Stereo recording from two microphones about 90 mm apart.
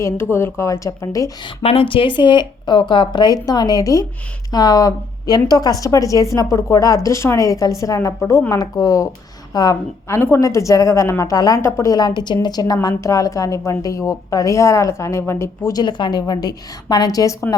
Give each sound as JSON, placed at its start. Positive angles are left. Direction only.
{"t": 0.0, "sound": "a woman's voice", "side_deg": 25}
{"t": 1.5, "sound": "a woman's voice", "side_deg": 80}
{"t": 10.1, "sound": "a woman's voice", "side_deg": 25}
{"t": 10.4, "sound": "a woman's voice", "side_deg": 35}
{"t": 15.7, "sound": "a woman's voice", "side_deg": 55}